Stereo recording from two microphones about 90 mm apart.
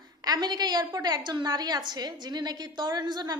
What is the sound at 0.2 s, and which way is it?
A woman's voice, 50° right (ahead or behind).